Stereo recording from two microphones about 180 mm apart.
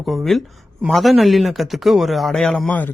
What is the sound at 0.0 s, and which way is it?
Speech, centre (ahead or behind).